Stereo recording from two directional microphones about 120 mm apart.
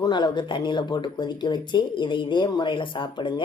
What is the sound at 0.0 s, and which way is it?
Speech, 35° left (ahead or behind).